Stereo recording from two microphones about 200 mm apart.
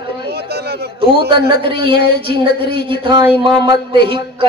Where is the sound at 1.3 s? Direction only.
25° right (ahead or behind).